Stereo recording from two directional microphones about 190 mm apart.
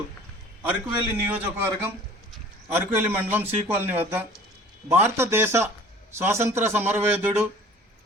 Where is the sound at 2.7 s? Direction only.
10° right (ahead or behind).